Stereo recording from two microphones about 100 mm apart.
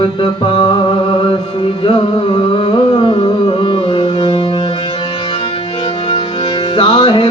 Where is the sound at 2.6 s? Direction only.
50° left (ahead or behind).